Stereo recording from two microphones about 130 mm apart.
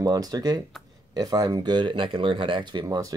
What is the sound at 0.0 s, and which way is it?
Speech, 30° right (ahead or behind).